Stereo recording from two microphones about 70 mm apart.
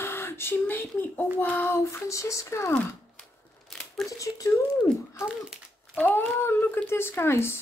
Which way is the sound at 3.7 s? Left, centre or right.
Centre.